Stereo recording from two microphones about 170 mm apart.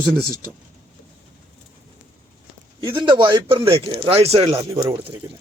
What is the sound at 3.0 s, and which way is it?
A man's voice, 30° right (ahead or behind).